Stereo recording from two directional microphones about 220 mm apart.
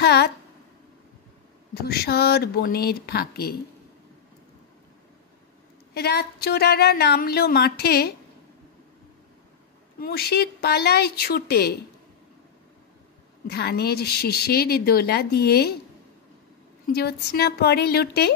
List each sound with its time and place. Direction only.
0.0 s a woman's voice: 50° left (ahead or behind)
1.7 s a woman's voice: 45° left (ahead or behind)
5.9 s a woman's voice: 45° left (ahead or behind)
9.9 s a woman's voice: 45° left (ahead or behind)
13.5 s a woman's voice: 45° left (ahead or behind)
16.8 s a woman's voice: 45° left (ahead or behind)